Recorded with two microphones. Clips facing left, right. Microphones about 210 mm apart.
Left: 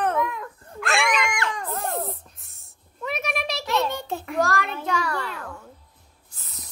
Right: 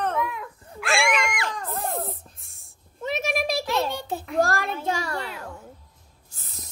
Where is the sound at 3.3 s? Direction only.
50° right (ahead or behind).